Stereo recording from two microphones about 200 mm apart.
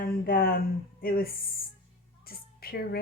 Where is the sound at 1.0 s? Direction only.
50° left (ahead or behind).